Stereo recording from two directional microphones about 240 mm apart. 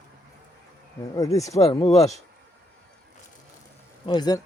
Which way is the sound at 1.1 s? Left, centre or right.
Centre.